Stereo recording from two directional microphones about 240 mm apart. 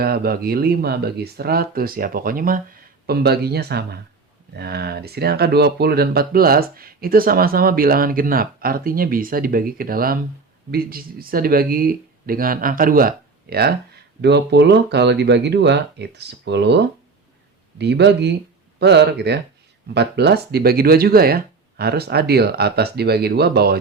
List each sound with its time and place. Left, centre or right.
0.0 s speech: right